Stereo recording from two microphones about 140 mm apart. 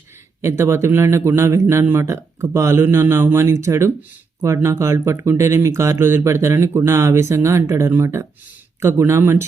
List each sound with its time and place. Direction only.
0.4 s speech: 20° right (ahead or behind)